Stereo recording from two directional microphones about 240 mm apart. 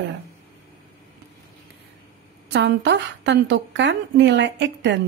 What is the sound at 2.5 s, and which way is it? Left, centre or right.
A woman's voice, right.